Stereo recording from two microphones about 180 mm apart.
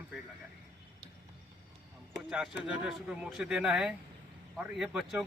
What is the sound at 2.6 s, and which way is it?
Speech, 5° right (ahead or behind).